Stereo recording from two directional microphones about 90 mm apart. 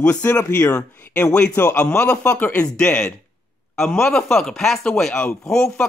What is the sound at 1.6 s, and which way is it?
Speech, 25° left (ahead or behind).